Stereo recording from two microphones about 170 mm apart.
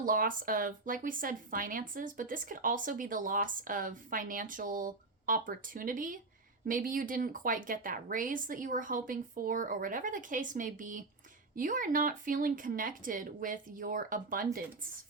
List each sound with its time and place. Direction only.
0.0 s speech: 55° right (ahead or behind)